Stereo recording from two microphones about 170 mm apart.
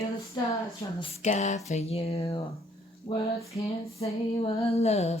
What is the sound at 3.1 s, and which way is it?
Speech, 15° left (ahead or behind).